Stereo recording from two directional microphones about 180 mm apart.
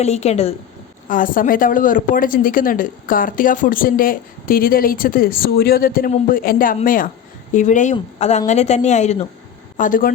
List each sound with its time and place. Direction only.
0.0 s a woman's voice: 35° left (ahead or behind)
1.0 s a woman's voice: 50° left (ahead or behind)